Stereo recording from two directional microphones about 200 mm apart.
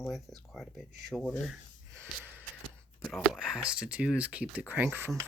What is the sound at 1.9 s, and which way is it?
Snort, 10° right (ahead or behind).